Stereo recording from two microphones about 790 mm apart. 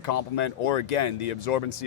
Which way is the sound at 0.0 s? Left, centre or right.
Left.